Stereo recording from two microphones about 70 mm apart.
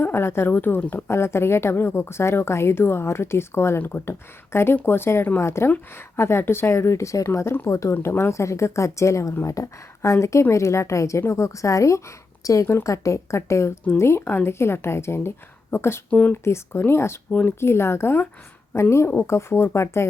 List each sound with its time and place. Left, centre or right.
0.0 s a woman's voice: left
1.1 s a woman's voice: left
12.6 s a woman's voice: left
16.0 s speech: centre
16.3 s a woman's voice: left